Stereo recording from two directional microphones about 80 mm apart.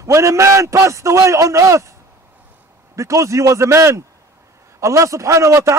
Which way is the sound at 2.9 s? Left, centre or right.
Right.